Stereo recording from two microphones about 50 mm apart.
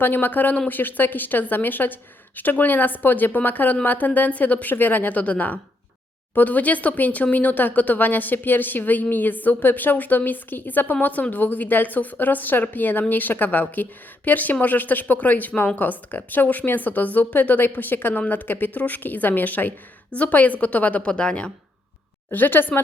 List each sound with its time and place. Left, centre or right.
0.0 s speech: left
4.7 s speech: left
21.1 s speech: centre
22.3 s speech: left